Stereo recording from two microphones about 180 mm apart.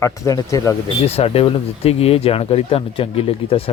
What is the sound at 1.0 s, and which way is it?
Speech, 35° left (ahead or behind).